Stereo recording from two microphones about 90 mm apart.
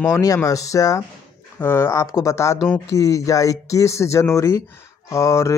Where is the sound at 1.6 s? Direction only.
25° left (ahead or behind).